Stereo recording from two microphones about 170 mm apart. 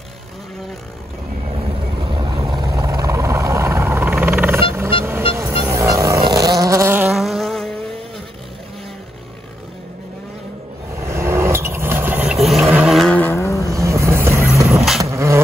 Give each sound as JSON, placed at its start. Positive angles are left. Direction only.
{"t": 2.0, "sound": "vehicle", "side_deg": -25}
{"t": 7.1, "sound": "vehicle", "side_deg": 0}
{"t": 11.1, "sound": "vehicle", "side_deg": -15}
{"t": 13.8, "sound": "music", "side_deg": -15}
{"t": 15.0, "sound": "vehicle", "side_deg": -15}